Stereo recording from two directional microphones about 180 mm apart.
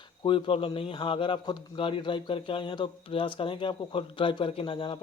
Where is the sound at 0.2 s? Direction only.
30° left (ahead or behind).